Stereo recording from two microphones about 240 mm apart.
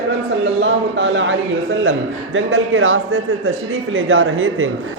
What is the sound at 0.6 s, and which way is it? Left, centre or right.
A man's voice, right.